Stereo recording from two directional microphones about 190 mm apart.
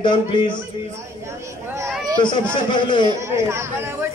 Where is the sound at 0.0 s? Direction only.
25° left (ahead or behind).